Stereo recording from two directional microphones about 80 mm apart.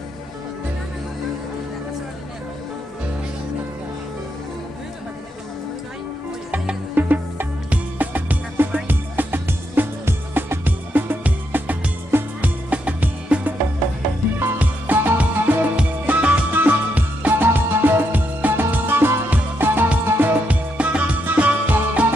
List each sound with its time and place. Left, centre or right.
6.5 s music: centre
7.0 s music: right